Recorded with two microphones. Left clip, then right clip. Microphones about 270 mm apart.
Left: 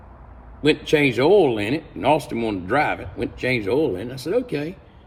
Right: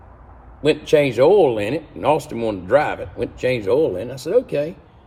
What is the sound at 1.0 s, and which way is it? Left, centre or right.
Speech, centre.